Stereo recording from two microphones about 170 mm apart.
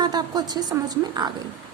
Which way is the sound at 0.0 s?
25° right (ahead or behind).